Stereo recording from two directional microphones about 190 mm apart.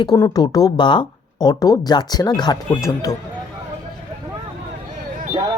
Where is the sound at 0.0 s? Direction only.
20° left (ahead or behind).